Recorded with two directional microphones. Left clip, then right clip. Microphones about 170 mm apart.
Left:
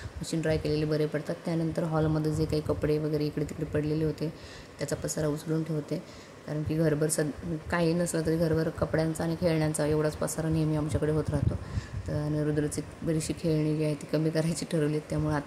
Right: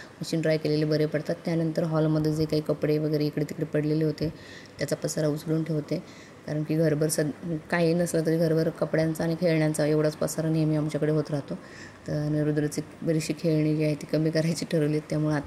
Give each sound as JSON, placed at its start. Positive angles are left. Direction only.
{"t": 0.2, "sound": "speech", "side_deg": -15}